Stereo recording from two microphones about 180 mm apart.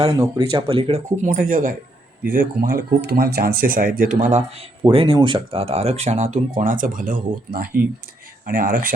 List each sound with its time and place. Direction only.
0.0 s speech: 20° right (ahead or behind); by 8.9 s 50° right (ahead or behind)